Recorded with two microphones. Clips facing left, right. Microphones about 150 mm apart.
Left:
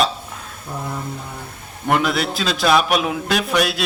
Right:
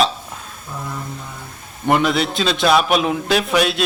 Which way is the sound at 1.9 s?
Centre (ahead or behind).